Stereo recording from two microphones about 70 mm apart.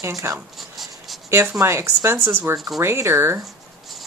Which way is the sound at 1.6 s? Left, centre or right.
Right.